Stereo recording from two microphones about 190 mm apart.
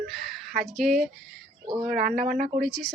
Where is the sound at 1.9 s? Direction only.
45° right (ahead or behind).